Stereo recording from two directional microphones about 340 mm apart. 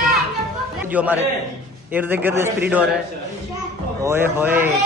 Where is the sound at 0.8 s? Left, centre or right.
Centre.